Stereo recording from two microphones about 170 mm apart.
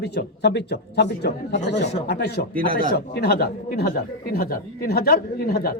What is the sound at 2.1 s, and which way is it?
Speech, 75° left (ahead or behind).